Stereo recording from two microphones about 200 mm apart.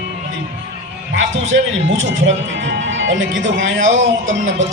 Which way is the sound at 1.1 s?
70° right (ahead or behind).